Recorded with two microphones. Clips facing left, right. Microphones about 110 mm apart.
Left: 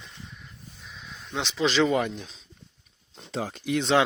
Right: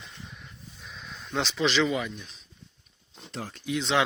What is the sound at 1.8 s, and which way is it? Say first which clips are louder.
Speech: left 7 dB; 45° left (ahead or behind).